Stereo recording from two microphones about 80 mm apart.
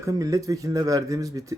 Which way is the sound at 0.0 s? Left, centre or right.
Right.